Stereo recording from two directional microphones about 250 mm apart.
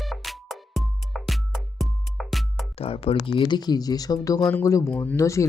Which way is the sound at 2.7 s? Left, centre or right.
Left.